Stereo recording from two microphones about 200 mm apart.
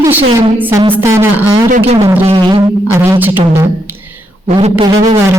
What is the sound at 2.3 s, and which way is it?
Speech, 25° right (ahead or behind).